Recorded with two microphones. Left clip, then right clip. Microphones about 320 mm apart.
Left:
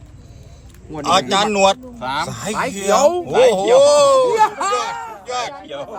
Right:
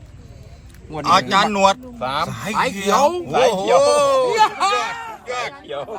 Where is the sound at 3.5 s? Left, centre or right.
Centre.